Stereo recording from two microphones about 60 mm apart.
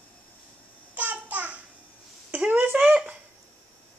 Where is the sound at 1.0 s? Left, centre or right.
Right.